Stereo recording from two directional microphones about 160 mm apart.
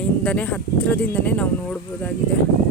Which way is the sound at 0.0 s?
10° left (ahead or behind).